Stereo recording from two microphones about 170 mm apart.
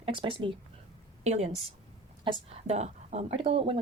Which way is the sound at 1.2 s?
40° right (ahead or behind).